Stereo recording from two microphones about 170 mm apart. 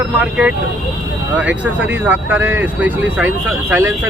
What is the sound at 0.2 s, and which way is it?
Speech, 5° right (ahead or behind).